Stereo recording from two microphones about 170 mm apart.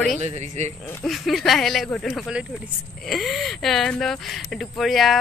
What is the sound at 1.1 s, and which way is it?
Speech, centre (ahead or behind).